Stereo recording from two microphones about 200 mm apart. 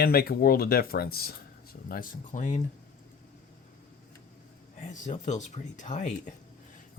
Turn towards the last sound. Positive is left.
turn(degrees=35)  # may be behind; listen again after turning